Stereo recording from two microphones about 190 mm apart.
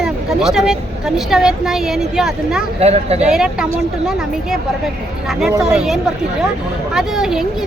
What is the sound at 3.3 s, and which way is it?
Speech, 5° right (ahead or behind).